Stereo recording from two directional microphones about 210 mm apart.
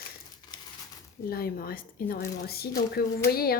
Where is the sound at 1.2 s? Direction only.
45° left (ahead or behind).